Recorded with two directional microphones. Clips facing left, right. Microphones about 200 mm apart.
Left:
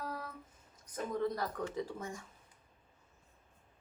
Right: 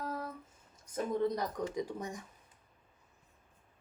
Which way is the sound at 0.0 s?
20° right (ahead or behind).